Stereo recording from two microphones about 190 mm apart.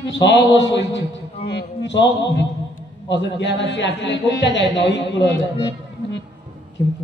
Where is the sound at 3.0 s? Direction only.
65° left (ahead or behind).